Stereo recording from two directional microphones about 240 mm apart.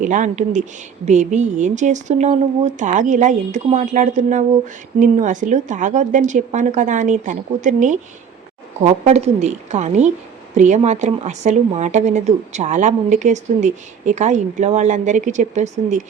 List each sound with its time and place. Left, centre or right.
0.0 s speech: right